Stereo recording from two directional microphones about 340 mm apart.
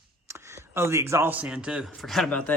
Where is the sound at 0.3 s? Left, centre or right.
Centre.